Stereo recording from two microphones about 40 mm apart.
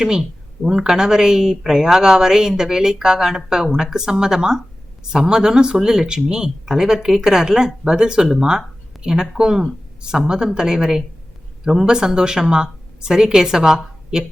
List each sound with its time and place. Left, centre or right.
0.0 s speech: centre